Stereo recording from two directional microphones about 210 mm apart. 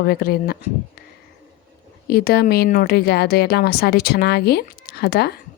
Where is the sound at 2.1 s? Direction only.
50° left (ahead or behind).